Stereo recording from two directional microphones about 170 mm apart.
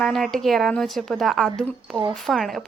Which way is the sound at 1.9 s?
30° right (ahead or behind).